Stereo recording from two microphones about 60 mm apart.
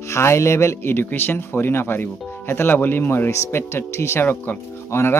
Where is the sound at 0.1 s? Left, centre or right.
Left.